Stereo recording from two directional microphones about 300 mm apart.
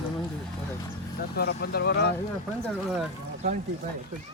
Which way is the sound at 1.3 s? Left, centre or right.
Left.